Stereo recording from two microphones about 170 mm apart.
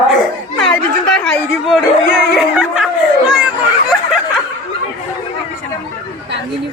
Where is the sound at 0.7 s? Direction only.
5° left (ahead or behind).